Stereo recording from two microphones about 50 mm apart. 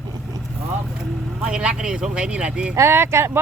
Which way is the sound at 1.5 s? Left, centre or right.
Centre.